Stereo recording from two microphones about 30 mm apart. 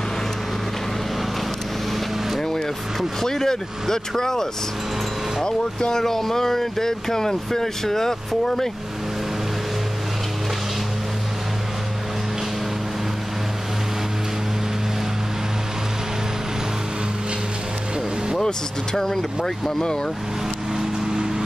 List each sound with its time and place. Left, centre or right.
3.2 s speech: centre
18.9 s speech: centre
20.7 s vehicle: centre